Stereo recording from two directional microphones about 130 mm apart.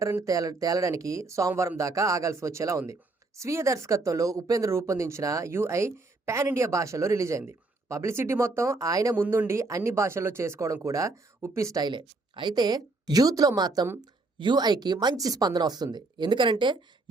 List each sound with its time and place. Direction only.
0.0 s speech: 25° right (ahead or behind)
9.1 s a woman's voice: 15° right (ahead or behind); by 16.7 s 40° right (ahead or behind)